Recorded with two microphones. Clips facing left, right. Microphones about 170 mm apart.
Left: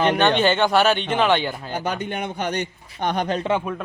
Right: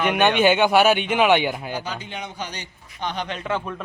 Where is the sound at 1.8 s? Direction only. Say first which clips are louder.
Left 6 dB; 55° left (ahead or behind).